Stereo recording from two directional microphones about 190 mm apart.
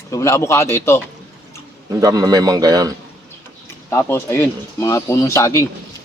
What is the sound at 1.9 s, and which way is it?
A man's voice, 20° right (ahead or behind).